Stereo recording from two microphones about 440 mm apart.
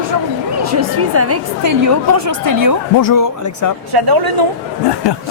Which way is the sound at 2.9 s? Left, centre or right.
Left.